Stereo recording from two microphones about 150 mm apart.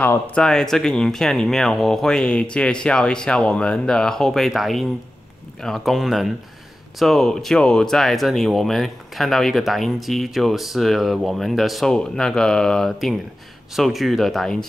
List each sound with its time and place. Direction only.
0.0 s speech: 10° left (ahead or behind)